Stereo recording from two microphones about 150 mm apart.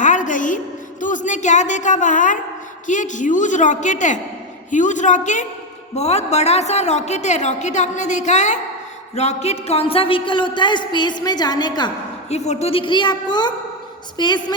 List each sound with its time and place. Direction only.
0.0 s a sound: 55° left (ahead or behind)
1.0 s a woman's voice: 55° left (ahead or behind); by 11.9 s 30° left (ahead or behind)
12.3 s a woman's voice: 45° left (ahead or behind); by 14.5 s 30° left (ahead or behind)